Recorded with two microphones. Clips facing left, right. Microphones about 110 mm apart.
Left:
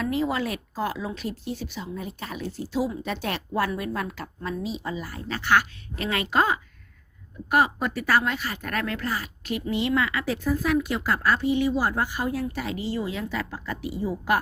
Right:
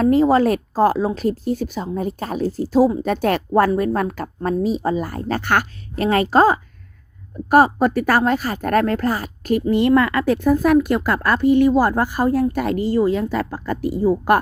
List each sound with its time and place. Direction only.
0.0 s a woman's voice: 40° right (ahead or behind)